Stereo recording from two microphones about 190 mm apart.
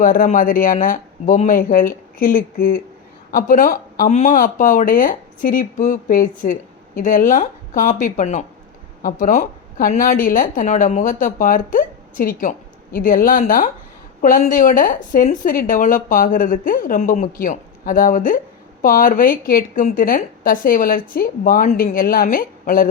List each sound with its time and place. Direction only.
0.0 s a woman's voice: 45° left (ahead or behind)